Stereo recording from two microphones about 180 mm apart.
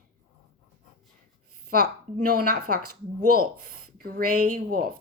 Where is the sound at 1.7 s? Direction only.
55° right (ahead or behind).